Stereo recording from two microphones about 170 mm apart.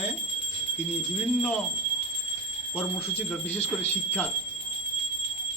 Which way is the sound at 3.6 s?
40° left (ahead or behind).